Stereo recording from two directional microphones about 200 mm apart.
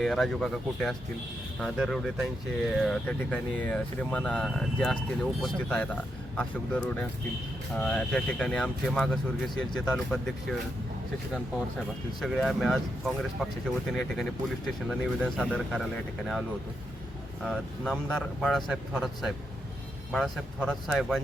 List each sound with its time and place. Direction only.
0.0 s speech: centre (ahead or behind)
12.2 s speech: centre (ahead or behind)
14.8 s speech: centre (ahead or behind)
17.4 s speech: centre (ahead or behind)